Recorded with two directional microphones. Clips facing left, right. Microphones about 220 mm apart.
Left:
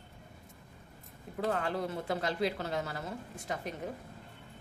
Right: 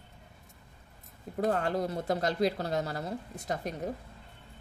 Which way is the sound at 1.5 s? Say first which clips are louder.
Right 3 dB; 40° right (ahead or behind).